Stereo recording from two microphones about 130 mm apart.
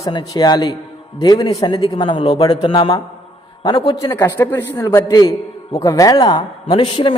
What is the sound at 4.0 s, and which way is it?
Speech, 20° left (ahead or behind).